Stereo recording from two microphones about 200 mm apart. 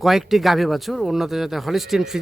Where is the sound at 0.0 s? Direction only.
Centre (ahead or behind).